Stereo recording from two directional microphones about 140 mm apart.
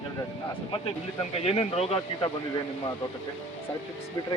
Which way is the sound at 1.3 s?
45° left (ahead or behind).